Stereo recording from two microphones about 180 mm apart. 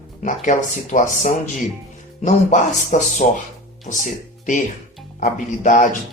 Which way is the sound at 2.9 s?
50° left (ahead or behind).